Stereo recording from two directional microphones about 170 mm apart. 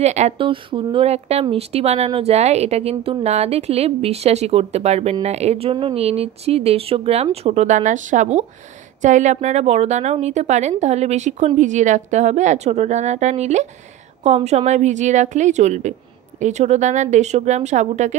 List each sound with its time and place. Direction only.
0.0 s a woman's voice: 40° right (ahead or behind)